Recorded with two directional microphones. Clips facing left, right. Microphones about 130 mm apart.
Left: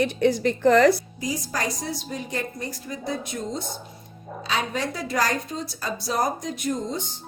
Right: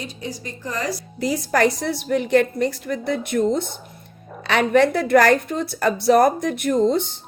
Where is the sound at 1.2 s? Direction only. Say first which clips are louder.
Right 9 dB; 70° right (ahead or behind).